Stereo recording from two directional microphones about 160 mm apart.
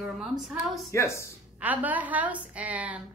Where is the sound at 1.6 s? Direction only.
10° right (ahead or behind).